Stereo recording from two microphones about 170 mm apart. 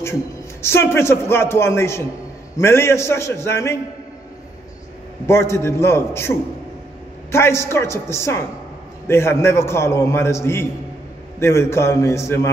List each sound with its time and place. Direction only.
0.0 s a man's voice: 15° left (ahead or behind)
5.2 s a man's voice: 15° left (ahead or behind)